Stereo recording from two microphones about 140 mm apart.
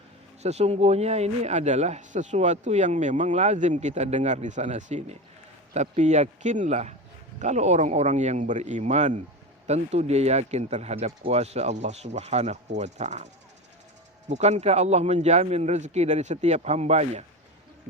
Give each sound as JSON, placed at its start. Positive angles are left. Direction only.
{"t": 0.4, "sound": "a man's voice", "side_deg": -50}
{"t": 14.3, "sound": "speech", "side_deg": -55}